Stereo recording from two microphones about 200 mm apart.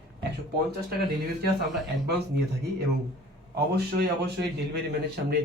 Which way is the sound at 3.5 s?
50° right (ahead or behind).